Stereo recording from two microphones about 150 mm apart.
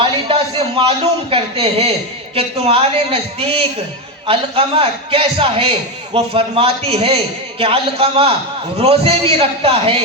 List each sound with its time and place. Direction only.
0.0 s a man's voice: 35° right (ahead or behind)